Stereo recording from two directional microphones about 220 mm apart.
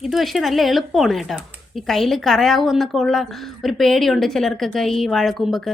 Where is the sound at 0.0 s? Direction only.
Centre (ahead or behind).